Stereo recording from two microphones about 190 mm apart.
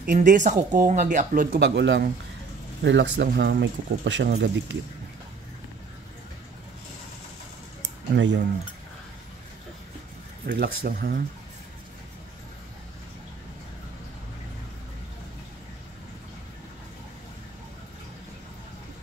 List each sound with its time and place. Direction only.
0.0 s speech: 45° right (ahead or behind)
1.6 s speech: 65° right (ahead or behind)
8.1 s speech: 70° right (ahead or behind)
10.4 s speech: 50° right (ahead or behind)